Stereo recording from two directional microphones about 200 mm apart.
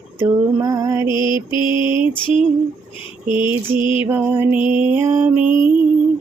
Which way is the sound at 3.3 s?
10° right (ahead or behind).